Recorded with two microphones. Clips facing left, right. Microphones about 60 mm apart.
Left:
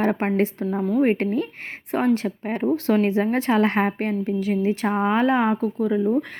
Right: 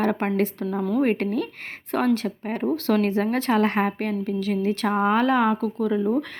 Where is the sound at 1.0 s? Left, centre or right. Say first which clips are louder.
Left 2 dB; left.